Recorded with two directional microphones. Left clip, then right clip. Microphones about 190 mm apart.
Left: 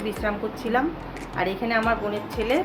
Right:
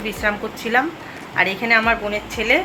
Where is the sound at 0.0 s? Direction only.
Centre (ahead or behind).